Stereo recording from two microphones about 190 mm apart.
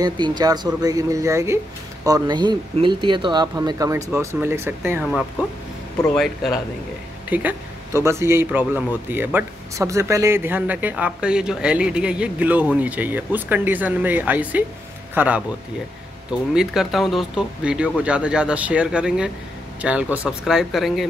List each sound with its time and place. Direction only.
0.0 s speech: 20° right (ahead or behind)
6.0 s speech: centre (ahead or behind)